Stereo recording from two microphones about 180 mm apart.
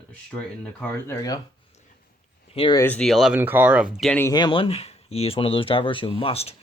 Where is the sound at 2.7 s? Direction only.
10° left (ahead or behind).